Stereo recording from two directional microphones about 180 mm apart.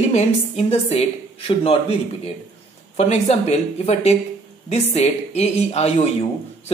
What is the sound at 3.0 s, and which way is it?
A woman's voice, 40° left (ahead or behind).